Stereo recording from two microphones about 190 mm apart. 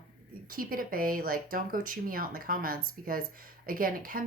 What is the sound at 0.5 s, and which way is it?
A woman's voice, 50° right (ahead or behind).